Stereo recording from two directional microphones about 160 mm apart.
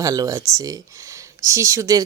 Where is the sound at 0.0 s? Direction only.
20° right (ahead or behind).